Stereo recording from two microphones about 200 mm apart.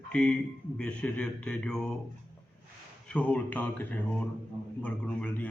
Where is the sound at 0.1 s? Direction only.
5° left (ahead or behind).